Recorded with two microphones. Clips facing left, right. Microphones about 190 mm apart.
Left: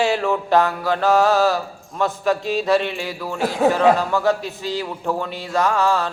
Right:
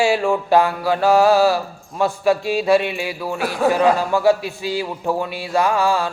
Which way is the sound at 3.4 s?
20° left (ahead or behind).